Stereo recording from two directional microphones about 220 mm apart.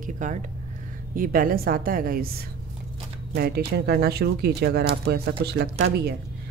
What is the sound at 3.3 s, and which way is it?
A woman's voice, 45° right (ahead or behind).